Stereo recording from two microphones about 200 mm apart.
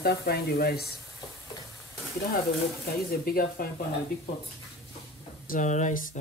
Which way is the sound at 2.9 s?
50° left (ahead or behind).